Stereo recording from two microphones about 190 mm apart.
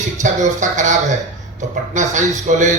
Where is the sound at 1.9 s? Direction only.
40° right (ahead or behind).